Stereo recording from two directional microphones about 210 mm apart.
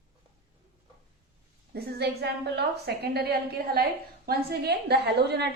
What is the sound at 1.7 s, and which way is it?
A woman's voice, 50° right (ahead or behind).